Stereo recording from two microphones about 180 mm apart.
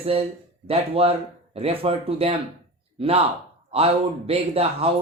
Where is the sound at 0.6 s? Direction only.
30° right (ahead or behind).